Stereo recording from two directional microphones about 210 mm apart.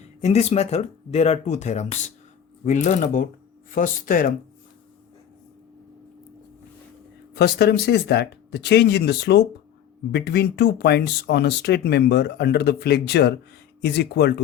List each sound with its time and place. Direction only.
0.2 s speech: 30° left (ahead or behind)
7.3 s speech: 50° left (ahead or behind)